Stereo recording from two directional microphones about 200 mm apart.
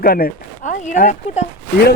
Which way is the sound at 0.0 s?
50° left (ahead or behind).